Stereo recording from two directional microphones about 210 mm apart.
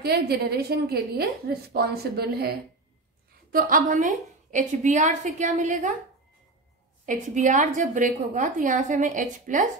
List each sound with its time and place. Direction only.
0.0 s a woman's voice: 50° right (ahead or behind)
3.5 s a woman's voice: 40° right (ahead or behind)
7.1 s a woman's voice: 35° right (ahead or behind)